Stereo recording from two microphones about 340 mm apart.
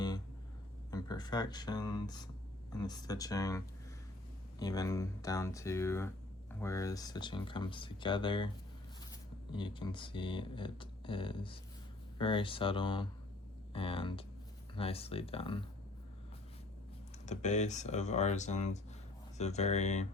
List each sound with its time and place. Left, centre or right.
0.9 s speech: centre
4.6 s speech: centre
9.5 s speech: centre
17.2 s speech: left